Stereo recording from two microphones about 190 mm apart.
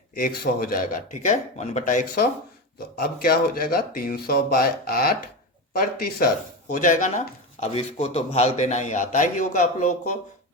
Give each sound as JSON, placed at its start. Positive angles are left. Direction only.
{"t": 0.1, "sound": "speech", "side_deg": 50}
{"t": 1.2, "sound": "a man's voice", "side_deg": 40}